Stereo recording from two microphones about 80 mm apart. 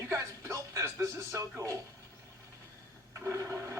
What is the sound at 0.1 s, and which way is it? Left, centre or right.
Music, right.